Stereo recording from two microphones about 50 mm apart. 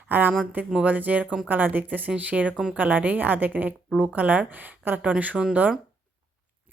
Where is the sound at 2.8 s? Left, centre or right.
Right.